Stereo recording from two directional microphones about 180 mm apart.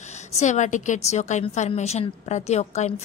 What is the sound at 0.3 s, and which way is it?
A woman's voice, 40° left (ahead or behind).